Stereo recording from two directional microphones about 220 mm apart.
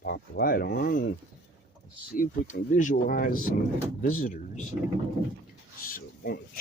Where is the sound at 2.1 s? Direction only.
35° left (ahead or behind).